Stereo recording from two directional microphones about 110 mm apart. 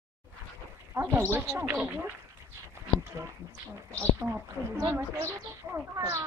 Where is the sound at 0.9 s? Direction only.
25° right (ahead or behind).